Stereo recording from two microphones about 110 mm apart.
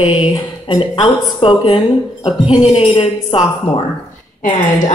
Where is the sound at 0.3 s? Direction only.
45° left (ahead or behind).